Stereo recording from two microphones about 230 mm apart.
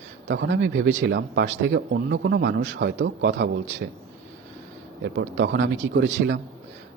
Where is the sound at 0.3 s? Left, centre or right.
Right.